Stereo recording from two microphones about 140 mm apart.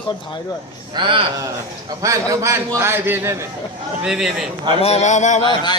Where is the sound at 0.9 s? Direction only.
35° right (ahead or behind).